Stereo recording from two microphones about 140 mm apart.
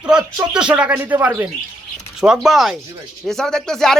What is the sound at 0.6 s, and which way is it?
Speech, 10° right (ahead or behind).